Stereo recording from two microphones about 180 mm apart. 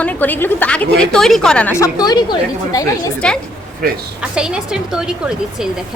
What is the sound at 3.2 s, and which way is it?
A woman's voice, 5° left (ahead or behind).